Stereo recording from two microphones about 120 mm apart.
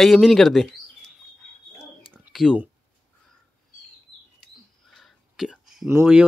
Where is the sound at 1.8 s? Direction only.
35° right (ahead or behind).